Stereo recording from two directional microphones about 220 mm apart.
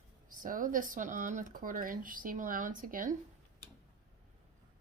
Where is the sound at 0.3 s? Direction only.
40° right (ahead or behind).